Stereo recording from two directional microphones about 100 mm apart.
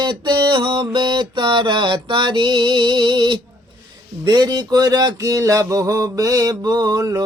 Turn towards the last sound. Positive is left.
turn(degrees=-35)  # may be behind; listen again after turning